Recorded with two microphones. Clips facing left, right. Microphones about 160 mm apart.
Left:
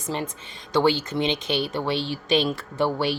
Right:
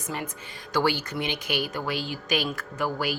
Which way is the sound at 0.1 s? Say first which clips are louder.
Left 4 dB; 30° left (ahead or behind).